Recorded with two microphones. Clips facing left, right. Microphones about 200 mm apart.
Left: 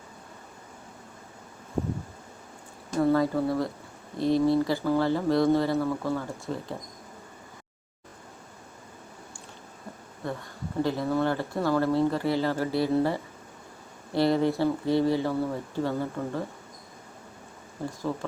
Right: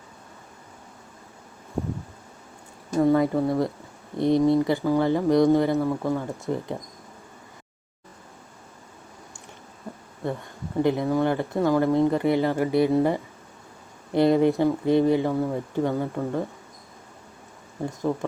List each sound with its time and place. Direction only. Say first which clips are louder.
3.0 s speech: right 3 dB; 15° right (ahead or behind)
10.8 s speech: right 4 dB; 15° right (ahead or behind)
18.1 s speech: right 5 dB; 20° right (ahead or behind)